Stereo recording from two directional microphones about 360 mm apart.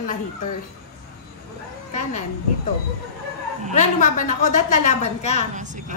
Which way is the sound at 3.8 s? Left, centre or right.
Left.